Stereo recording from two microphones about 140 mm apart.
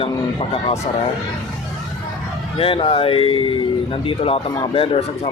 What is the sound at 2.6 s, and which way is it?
A man's voice, 40° left (ahead or behind).